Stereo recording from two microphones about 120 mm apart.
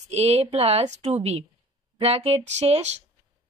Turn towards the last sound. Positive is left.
turn(degrees=-65)  # may be behind; listen again after turning